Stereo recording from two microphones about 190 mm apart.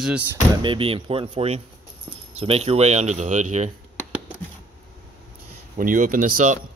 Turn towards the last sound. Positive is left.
turn(degrees=-45)  # may be behind; listen again after turning